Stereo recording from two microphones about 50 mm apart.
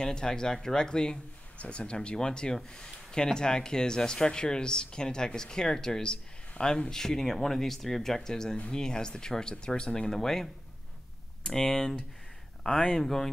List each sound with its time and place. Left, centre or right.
0.0 s speech: centre